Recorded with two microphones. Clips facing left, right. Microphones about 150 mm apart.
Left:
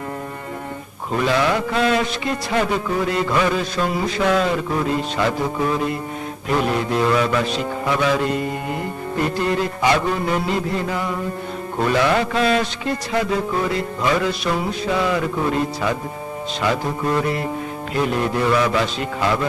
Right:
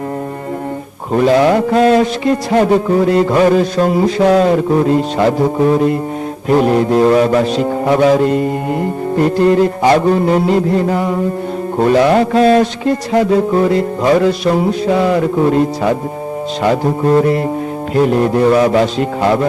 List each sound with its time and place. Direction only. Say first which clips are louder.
1.1 s a man's voice: right 9 dB; 40° right (ahead or behind)